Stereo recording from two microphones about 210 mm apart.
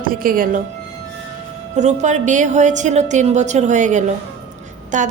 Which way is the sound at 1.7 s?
35° right (ahead or behind).